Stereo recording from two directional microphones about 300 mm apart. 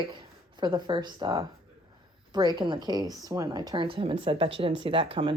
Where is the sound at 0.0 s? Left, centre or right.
Centre.